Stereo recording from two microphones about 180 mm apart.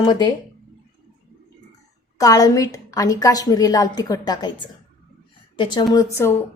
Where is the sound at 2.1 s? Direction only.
20° left (ahead or behind).